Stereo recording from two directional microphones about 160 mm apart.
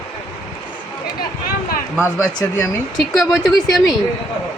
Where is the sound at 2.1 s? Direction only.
20° left (ahead or behind).